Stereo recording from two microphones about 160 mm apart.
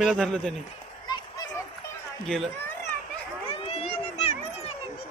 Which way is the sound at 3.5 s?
35° left (ahead or behind).